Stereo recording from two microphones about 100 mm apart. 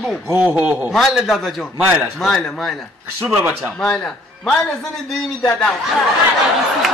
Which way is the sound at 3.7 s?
5° left (ahead or behind).